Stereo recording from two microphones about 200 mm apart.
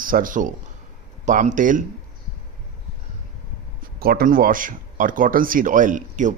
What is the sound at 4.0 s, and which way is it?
Speech, 50° right (ahead or behind).